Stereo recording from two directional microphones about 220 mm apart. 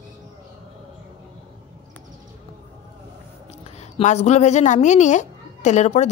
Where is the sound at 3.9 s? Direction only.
30° left (ahead or behind).